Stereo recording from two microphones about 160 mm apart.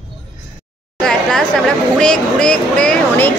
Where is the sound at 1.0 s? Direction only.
5° left (ahead or behind).